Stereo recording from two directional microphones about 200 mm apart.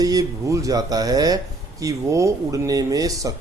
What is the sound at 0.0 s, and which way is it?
Speech, 20° right (ahead or behind).